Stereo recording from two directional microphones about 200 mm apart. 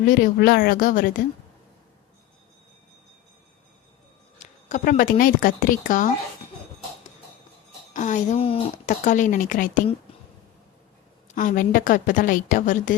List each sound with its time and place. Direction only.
0.0 s speech: 45° left (ahead or behind)
4.7 s speech: 40° left (ahead or behind)
7.9 s a woman's voice: 35° left (ahead or behind)
8.9 s a woman's voice: 40° left (ahead or behind)
11.3 s a woman's voice: 40° left (ahead or behind)